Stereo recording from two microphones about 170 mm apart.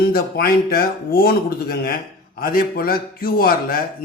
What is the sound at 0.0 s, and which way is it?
Speech, 60° left (ahead or behind).